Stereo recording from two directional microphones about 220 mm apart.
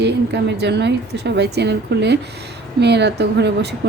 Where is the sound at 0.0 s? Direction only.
50° right (ahead or behind).